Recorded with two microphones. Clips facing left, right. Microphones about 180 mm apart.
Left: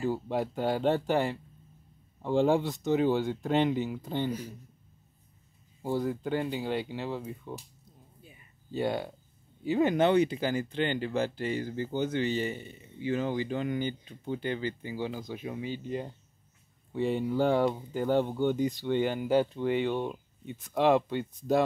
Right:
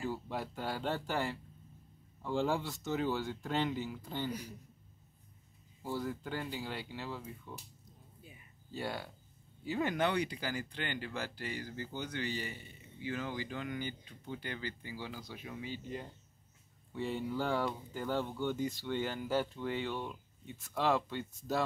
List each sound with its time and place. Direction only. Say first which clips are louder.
0.0 s speech: left 8 dB; 20° left (ahead or behind)
5.8 s speech: left 8 dB; 20° left (ahead or behind)
8.7 s speech: left 9 dB; 20° left (ahead or behind)